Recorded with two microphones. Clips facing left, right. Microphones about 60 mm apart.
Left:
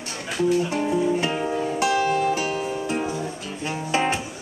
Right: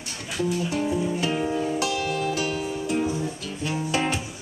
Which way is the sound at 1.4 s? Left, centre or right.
Centre.